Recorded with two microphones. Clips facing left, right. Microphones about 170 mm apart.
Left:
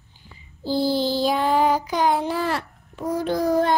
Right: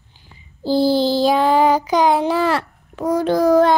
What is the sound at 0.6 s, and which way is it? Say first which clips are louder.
Child singing: right 6 dB; 90° right.